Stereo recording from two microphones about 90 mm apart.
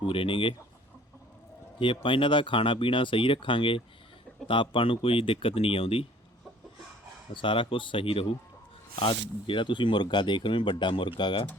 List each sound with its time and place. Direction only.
0.0 s speech: 85° left
1.8 s speech: 75° left (ahead or behind); by 6.1 s 90° left
7.3 s speech: 75° left (ahead or behind); by 8.3 s 90° left
9.0 s speech: 70° left (ahead or behind)